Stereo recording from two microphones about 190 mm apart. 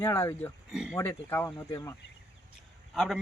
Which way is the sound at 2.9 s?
Centre (ahead or behind).